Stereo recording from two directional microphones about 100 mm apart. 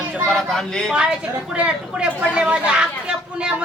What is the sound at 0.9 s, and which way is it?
Speech, 10° right (ahead or behind).